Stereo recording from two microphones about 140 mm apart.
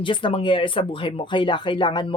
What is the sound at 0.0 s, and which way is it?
Speech, 35° left (ahead or behind).